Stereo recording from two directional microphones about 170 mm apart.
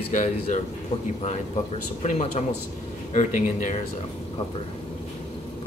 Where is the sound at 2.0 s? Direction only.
40° left (ahead or behind).